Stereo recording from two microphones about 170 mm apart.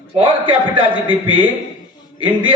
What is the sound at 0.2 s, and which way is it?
Speech, 30° right (ahead or behind).